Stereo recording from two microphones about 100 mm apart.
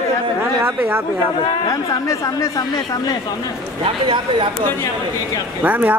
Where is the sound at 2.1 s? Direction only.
35° left (ahead or behind).